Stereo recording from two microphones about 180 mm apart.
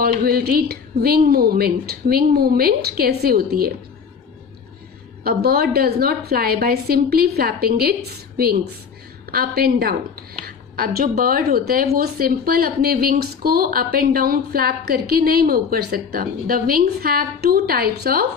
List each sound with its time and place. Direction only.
0.0 s a woman's voice: 55° right (ahead or behind)
5.2 s a woman's voice: 60° right (ahead or behind)